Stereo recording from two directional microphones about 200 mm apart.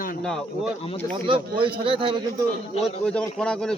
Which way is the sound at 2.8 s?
5° left (ahead or behind).